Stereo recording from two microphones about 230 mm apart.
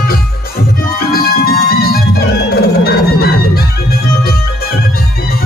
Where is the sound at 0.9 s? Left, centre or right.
Left.